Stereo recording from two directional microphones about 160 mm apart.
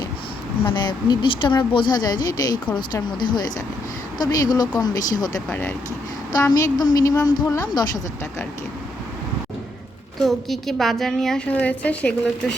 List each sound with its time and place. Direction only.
0.6 s a woman's voice: 30° left (ahead or behind)
5.5 s speech: 10° left (ahead or behind)
6.3 s a woman's voice: 25° left (ahead or behind)
10.2 s a woman's voice: centre (ahead or behind)